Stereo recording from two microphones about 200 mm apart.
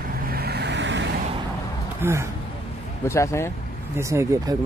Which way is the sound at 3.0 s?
15° left (ahead or behind).